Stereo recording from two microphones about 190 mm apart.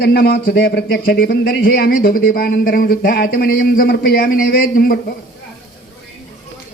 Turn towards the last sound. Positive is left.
turn(degrees=50)  # may be behind; listen again after turning